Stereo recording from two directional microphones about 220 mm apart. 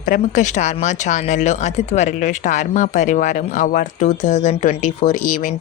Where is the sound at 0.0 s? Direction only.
35° left (ahead or behind).